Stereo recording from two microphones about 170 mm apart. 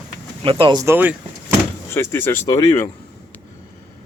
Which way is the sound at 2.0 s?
15° left (ahead or behind).